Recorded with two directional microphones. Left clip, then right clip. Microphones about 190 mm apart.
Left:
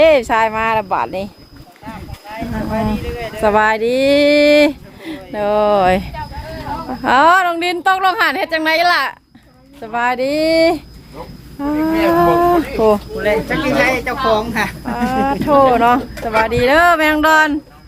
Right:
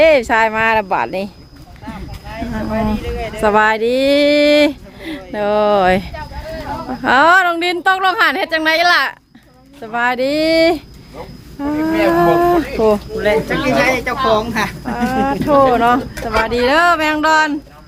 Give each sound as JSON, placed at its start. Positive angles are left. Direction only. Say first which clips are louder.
{"t": 0.0, "sound": "a woman's voice", "louder": "even", "side_deg": -10}
{"t": 2.3, "sound": "a woman's voice", "louder": "even", "side_deg": 0}
{"t": 5.0, "sound": "a woman's voice", "louder": "even", "side_deg": -10}
{"t": 13.7, "sound": "a woman's voice", "louder": "even", "side_deg": -25}
{"t": 14.8, "sound": "speech", "louder": "left 1 dB", "side_deg": 10}